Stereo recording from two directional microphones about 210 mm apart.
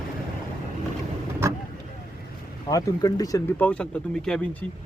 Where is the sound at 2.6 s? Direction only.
15° left (ahead or behind).